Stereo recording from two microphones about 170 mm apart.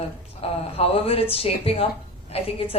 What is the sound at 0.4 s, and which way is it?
A woman's voice, 35° left (ahead or behind).